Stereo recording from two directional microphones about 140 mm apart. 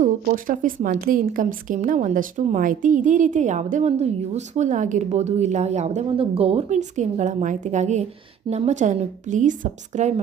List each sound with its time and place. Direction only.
0.0 s a woman's voice: 75° right (ahead or behind); by 10.2 s 55° right (ahead or behind)